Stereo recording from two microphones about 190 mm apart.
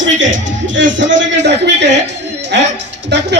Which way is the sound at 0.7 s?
75° right (ahead or behind).